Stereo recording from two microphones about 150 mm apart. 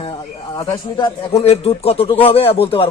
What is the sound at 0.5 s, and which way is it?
Speech, 30° left (ahead or behind).